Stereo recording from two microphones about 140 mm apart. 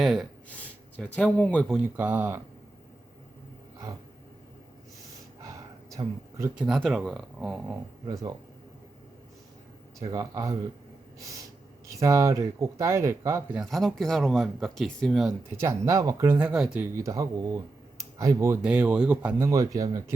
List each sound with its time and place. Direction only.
0.0 s speech: centre (ahead or behind)
0.4 s speech: 10° left (ahead or behind)
1.6 s speech: 10° right (ahead or behind)
5.4 s a sound: 25° right (ahead or behind)
6.6 s speech: centre (ahead or behind)
8.0 s speech: 30° right (ahead or behind)
10.0 s speech: 25° right (ahead or behind)
11.9 s speech: 20° right (ahead or behind)
13.5 s speech: centre (ahead or behind)
15.4 s speech: 20° right (ahead or behind)
16.5 s speech: 5° right (ahead or behind)
16.9 s speech: 20° right (ahead or behind)
18.6 s speech: 5° right (ahead or behind)
19.4 s speech: 20° right (ahead or behind)